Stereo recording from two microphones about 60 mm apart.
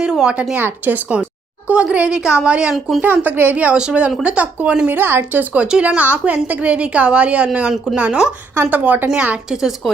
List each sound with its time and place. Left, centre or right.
0.0 s a sound: centre
0.5 s a woman's voice: right; by 2.7 s centre
3.0 s a woman's voice: right
4.9 s speech: right
5.5 s speech: centre
6.0 s a woman's voice: right
9.5 s speech: centre